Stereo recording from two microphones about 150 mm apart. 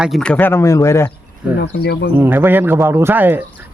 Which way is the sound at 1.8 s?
90° left.